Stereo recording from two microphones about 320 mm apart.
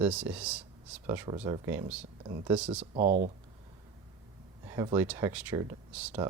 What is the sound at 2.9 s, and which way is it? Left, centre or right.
Speech, right.